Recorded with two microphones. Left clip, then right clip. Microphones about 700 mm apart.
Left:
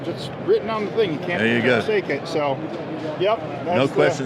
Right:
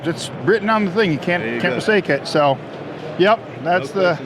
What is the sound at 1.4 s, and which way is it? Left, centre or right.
Speech, left.